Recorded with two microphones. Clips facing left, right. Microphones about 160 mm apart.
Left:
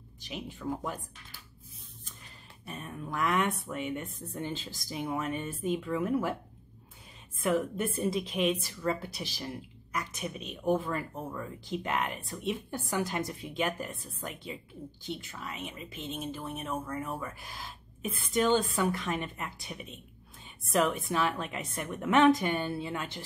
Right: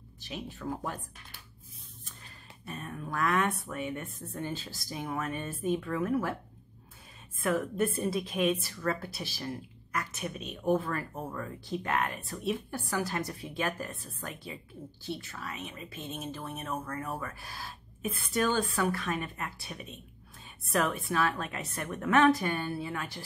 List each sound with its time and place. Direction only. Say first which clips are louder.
0.2 s a woman's voice: even; 15° left (ahead or behind)
2.6 s a woman's voice: right 1 dB; 15° left (ahead or behind)
7.4 s a woman's voice: even; 20° left (ahead or behind)